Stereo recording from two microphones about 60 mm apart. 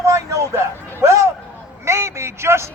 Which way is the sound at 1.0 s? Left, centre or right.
Right.